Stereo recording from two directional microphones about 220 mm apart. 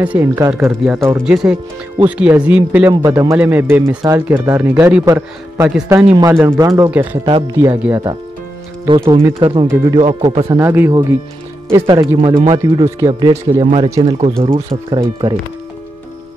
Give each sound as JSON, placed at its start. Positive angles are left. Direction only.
{"t": 0.0, "sound": "speech", "side_deg": -10}
{"t": 7.2, "sound": "speech", "side_deg": -20}
{"t": 9.4, "sound": "speech", "side_deg": -20}
{"t": 10.6, "sound": "speech", "side_deg": -10}